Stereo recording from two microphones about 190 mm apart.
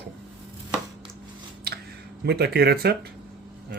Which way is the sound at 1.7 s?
55° right (ahead or behind).